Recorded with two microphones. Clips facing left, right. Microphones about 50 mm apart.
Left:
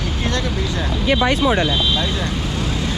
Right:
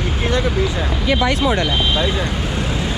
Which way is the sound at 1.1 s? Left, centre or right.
Left.